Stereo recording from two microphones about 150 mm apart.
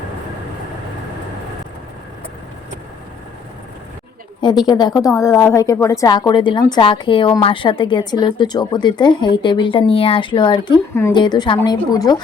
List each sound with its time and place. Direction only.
4.4 s a woman's voice: 30° left (ahead or behind)